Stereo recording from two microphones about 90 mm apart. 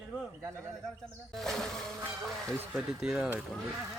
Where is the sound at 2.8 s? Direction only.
5° right (ahead or behind).